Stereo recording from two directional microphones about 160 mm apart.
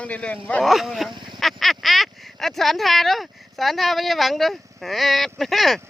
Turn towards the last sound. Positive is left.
turn(degrees=0)  # may be behind; listen again after turning